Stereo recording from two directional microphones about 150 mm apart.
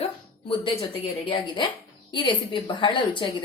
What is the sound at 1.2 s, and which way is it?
A woman's voice, 35° left (ahead or behind).